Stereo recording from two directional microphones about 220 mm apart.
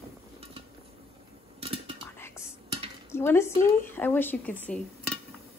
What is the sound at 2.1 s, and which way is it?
Whispering, 10° left (ahead or behind).